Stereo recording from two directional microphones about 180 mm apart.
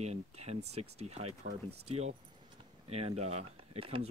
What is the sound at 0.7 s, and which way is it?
Speech, 35° right (ahead or behind).